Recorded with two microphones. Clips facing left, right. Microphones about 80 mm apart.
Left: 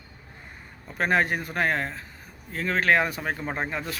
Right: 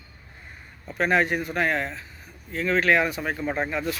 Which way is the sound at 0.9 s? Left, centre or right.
Left.